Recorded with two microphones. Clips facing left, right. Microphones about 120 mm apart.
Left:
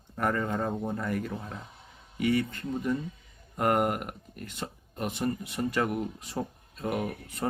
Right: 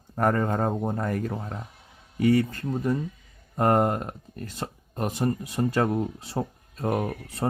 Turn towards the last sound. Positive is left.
turn(degrees=-35)  # may be behind; listen again after turning